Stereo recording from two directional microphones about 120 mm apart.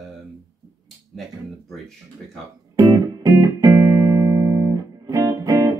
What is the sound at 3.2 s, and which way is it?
Music, 25° right (ahead or behind).